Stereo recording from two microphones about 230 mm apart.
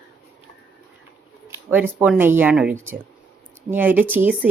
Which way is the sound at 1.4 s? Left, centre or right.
Centre.